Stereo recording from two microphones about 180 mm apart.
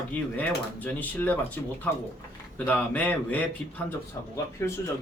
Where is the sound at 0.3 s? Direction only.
10° left (ahead or behind).